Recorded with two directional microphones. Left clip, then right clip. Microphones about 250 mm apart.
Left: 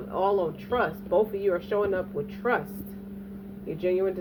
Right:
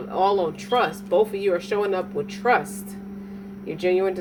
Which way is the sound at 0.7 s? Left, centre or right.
Right.